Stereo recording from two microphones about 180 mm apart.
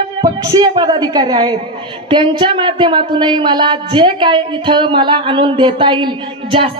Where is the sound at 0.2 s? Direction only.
25° right (ahead or behind).